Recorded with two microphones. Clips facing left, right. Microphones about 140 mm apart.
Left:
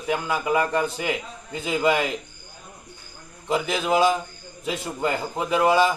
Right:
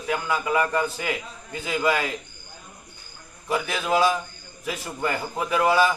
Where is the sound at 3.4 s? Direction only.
15° left (ahead or behind).